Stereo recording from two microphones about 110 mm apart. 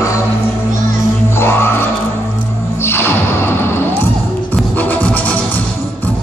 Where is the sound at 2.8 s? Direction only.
20° left (ahead or behind).